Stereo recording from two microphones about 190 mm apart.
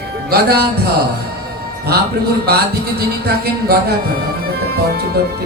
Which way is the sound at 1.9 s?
55° right (ahead or behind).